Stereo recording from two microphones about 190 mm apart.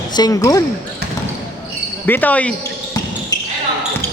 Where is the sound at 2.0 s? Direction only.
10° left (ahead or behind).